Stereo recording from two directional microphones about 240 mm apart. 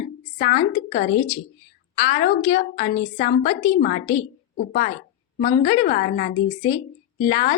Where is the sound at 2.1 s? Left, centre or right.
Left.